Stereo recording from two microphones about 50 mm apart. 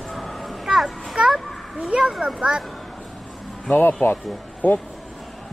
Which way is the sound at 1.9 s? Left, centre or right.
Centre.